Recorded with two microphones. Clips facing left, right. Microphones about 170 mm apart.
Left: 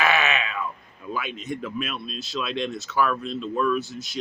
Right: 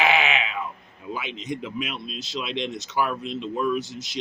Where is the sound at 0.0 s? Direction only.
15° right (ahead or behind).